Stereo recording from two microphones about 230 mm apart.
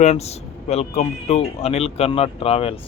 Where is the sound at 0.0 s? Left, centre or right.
Left.